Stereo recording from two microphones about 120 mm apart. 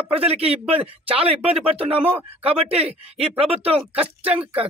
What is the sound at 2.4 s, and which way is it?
Speech, 55° right (ahead or behind).